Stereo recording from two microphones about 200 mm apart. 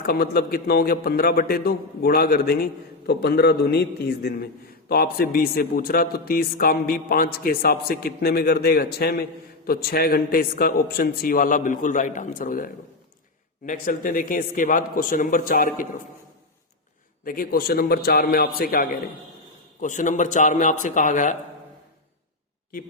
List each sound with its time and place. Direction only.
0.0 s a man's voice: 50° left (ahead or behind)
17.2 s a man's voice: 45° left (ahead or behind)